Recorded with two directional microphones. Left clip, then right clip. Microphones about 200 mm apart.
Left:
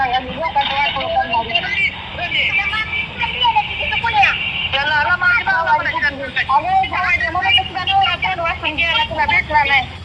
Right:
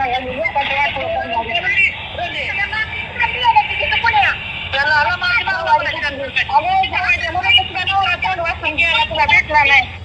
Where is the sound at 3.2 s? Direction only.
20° left (ahead or behind).